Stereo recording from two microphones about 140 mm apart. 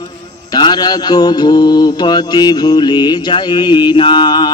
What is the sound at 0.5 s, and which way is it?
Mantra, 30° left (ahead or behind).